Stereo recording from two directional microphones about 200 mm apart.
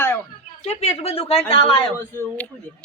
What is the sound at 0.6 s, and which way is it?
Speech, 35° left (ahead or behind).